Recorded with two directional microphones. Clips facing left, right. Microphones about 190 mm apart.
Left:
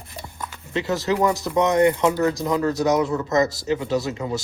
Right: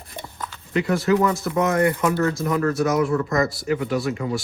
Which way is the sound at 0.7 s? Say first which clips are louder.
Right 3 dB; 20° left (ahead or behind).